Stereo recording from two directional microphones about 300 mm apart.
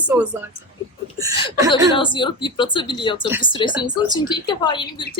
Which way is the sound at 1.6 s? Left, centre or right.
Centre.